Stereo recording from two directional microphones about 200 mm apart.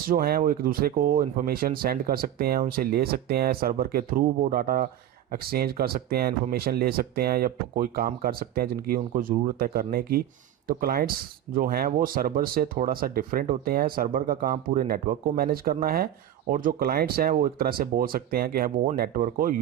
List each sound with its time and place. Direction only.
0.1 s speech: 50° right (ahead or behind)